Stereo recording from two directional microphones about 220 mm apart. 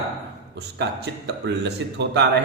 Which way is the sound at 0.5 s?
50° right (ahead or behind).